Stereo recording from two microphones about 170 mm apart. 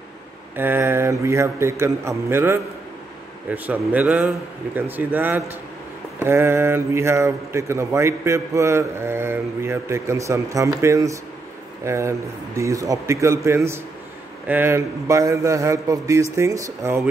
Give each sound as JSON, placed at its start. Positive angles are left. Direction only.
{"t": 0.6, "sound": "speech", "side_deg": -10}